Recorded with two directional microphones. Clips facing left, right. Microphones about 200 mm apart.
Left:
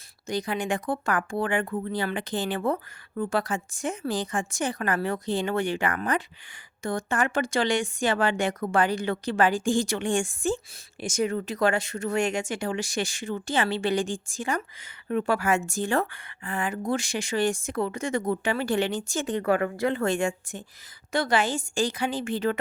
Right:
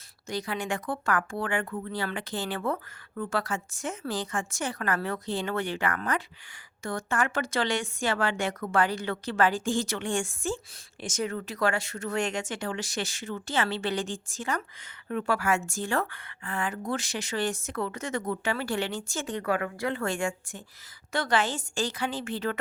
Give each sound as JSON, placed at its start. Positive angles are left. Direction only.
{"t": 0.3, "sound": "speech", "side_deg": 15}